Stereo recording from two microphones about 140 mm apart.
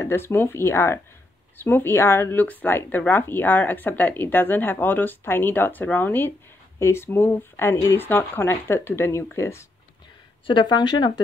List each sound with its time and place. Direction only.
0.0 s speech: 15° left (ahead or behind)
10.4 s speech: 35° left (ahead or behind)